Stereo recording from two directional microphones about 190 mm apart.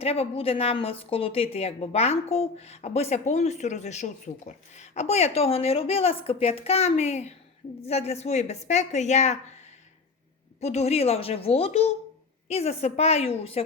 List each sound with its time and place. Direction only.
0.0 s a woman's voice: 30° left (ahead or behind)
10.6 s a woman's voice: 35° left (ahead or behind)